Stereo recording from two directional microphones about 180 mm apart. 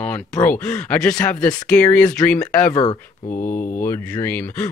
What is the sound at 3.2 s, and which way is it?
Speech, 50° left (ahead or behind).